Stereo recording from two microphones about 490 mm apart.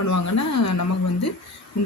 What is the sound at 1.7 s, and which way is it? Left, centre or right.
Speech, left.